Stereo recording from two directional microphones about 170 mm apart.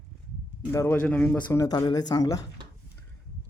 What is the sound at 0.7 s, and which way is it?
Speech, 15° left (ahead or behind).